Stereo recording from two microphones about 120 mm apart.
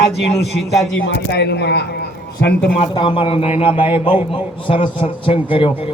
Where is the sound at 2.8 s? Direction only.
45° left (ahead or behind).